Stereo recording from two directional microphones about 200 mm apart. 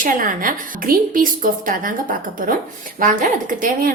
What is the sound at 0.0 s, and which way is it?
A woman's voice, 40° right (ahead or behind).